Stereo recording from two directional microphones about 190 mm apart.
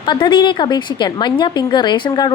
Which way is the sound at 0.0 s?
25° left (ahead or behind).